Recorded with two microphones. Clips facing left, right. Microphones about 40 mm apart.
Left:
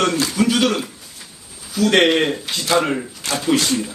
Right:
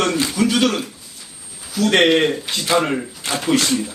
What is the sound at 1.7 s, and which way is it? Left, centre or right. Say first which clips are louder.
Speech: even; centre.